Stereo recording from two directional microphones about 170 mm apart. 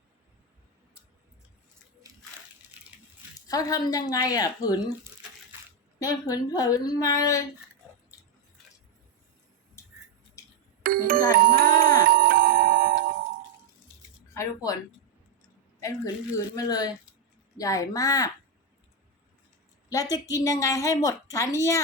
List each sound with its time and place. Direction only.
2.7 s a sound: 10° right (ahead or behind)
3.4 s a woman's voice: 20° left (ahead or behind)
6.0 s a woman's voice: 20° left (ahead or behind)
10.4 s a sound: 15° left (ahead or behind)
10.8 s music: 60° right (ahead or behind)
14.3 s speech: 20° left (ahead or behind)
15.8 s a woman's voice: 20° left (ahead or behind)
19.9 s a woman's voice: 20° left (ahead or behind)